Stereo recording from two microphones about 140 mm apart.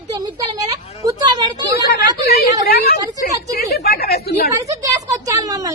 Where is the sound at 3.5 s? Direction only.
90° left.